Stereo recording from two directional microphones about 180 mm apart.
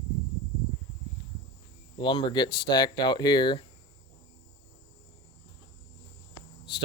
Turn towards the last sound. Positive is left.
turn(degrees=25)  # may be behind; listen again after turning